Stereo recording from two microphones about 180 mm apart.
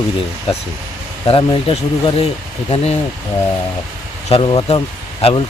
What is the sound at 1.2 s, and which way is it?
Speech, 30° left (ahead or behind).